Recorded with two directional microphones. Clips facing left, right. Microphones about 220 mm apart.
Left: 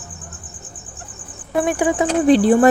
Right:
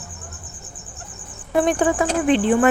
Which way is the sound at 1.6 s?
5° left (ahead or behind).